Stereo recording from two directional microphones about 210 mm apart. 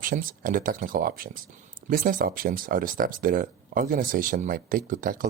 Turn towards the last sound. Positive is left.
turn(degrees=-40)  # may be behind; listen again after turning